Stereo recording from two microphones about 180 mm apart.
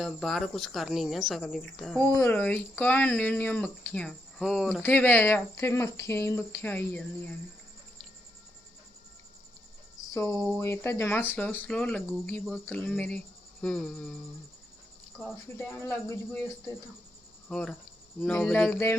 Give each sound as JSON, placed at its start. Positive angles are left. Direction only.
{"t": 0.0, "sound": "speech", "side_deg": 0}
{"t": 4.8, "sound": "speech", "side_deg": 10}
{"t": 10.1, "sound": "a sound", "side_deg": 20}
{"t": 10.6, "sound": "speech", "side_deg": 15}
{"t": 15.9, "sound": "speech", "side_deg": 10}
{"t": 17.5, "sound": "speech", "side_deg": 5}